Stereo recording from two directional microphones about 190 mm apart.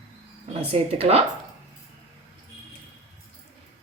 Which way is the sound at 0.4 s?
30° right (ahead or behind).